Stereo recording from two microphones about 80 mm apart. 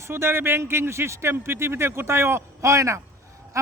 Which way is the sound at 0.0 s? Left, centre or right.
Right.